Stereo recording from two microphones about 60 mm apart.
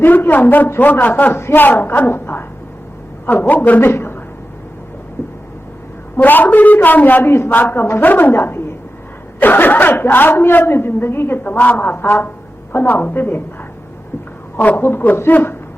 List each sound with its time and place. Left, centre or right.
0.0 s a man's voice: left
6.1 s a woman's voice: left
14.5 s a woman's voice: left
15.3 s a woman's voice: left